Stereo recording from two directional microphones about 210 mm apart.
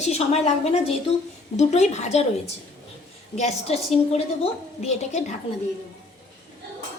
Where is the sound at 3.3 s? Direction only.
30° left (ahead or behind).